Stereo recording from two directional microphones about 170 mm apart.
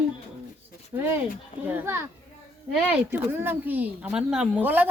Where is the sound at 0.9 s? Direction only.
15° right (ahead or behind).